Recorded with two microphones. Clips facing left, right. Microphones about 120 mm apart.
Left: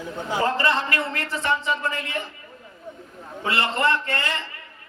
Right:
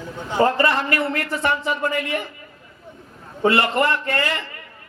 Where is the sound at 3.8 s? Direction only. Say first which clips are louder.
Right 3 dB; 25° left (ahead or behind).